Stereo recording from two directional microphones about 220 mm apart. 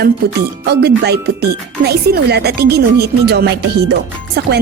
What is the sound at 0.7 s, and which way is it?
Speech, 50° right (ahead or behind).